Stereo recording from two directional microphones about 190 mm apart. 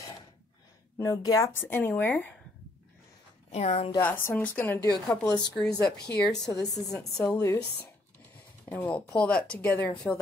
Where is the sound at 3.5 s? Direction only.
35° left (ahead or behind).